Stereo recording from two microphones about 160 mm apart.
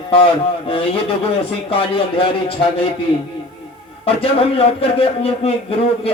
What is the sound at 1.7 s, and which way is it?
A man's voice, 35° left (ahead or behind).